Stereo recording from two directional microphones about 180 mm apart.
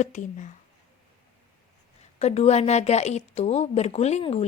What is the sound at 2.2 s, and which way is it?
Speech, 35° left (ahead or behind).